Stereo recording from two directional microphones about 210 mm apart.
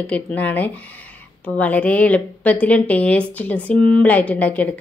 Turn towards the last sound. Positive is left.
turn(degrees=5)  # may be behind; listen again after turning